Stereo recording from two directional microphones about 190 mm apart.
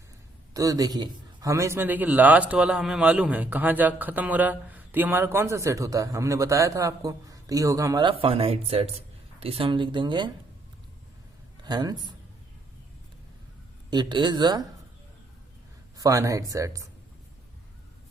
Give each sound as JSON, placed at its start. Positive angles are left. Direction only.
{"t": 0.5, "sound": "a man's voice", "side_deg": -20}
{"t": 11.6, "sound": "a man's voice", "side_deg": -20}
{"t": 13.9, "sound": "speech", "side_deg": -25}
{"t": 16.0, "sound": "a man's voice", "side_deg": -15}